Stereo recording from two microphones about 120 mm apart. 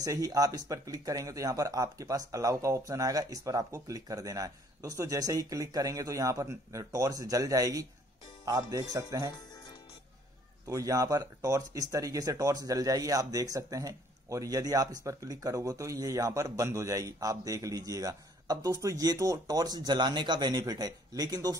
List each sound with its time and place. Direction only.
0.0 s speech: 30° right (ahead or behind)
10.7 s speech: 30° right (ahead or behind)